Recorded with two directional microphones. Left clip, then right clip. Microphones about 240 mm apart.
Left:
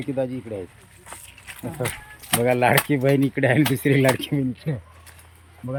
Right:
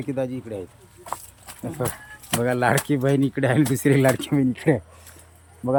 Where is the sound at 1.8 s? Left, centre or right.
Centre.